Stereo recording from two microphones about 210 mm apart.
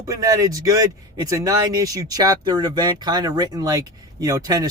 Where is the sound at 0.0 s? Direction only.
15° right (ahead or behind).